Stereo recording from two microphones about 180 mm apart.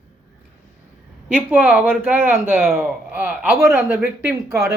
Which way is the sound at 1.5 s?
5° right (ahead or behind).